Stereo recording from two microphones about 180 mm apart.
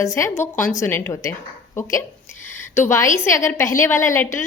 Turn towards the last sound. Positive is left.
turn(degrees=15)  # may be behind; listen again after turning